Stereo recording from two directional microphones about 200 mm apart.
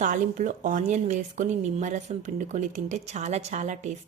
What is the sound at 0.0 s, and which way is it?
Speech, 40° right (ahead or behind).